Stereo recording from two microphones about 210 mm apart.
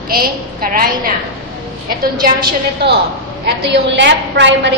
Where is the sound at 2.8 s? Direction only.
50° right (ahead or behind).